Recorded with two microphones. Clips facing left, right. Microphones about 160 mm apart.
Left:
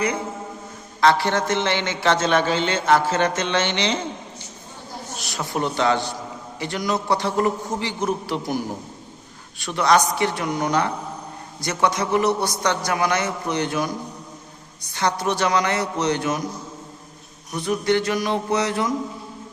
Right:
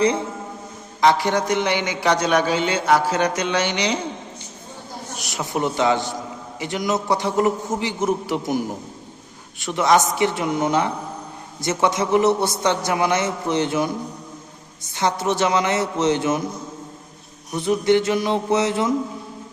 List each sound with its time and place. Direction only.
1.0 s a man's voice: 15° right (ahead or behind)
5.2 s a man's voice: 20° right (ahead or behind)
14.9 s a man's voice: 20° right (ahead or behind)
17.6 s a man's voice: 20° right (ahead or behind)